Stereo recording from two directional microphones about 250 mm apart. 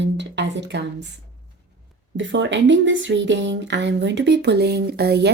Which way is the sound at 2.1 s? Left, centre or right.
Right.